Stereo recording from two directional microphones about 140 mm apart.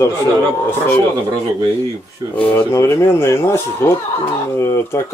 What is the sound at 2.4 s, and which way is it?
A man's voice, 15° left (ahead or behind).